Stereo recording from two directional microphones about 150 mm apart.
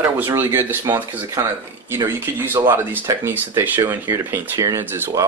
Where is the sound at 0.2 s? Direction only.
15° right (ahead or behind).